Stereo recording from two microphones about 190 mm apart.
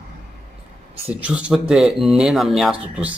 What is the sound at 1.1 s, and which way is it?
Speech, 5° right (ahead or behind).